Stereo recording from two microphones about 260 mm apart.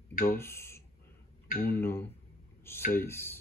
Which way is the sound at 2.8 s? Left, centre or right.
Left.